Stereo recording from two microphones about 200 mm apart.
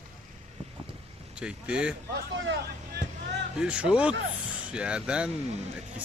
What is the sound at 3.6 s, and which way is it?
Speech, 5° right (ahead or behind).